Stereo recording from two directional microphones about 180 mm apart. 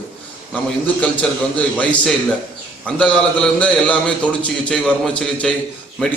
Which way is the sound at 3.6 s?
5° left (ahead or behind).